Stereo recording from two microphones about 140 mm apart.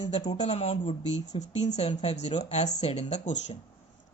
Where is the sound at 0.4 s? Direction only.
50° left (ahead or behind).